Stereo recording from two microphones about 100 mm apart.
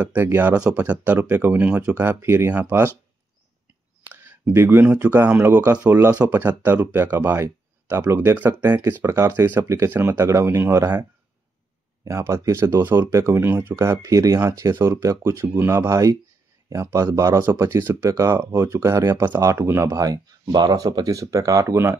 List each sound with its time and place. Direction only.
0.0 s speech: 20° right (ahead or behind)
4.1 s a sound: 25° right (ahead or behind)
4.5 s speech: 25° right (ahead or behind)
12.0 s speech: 30° right (ahead or behind)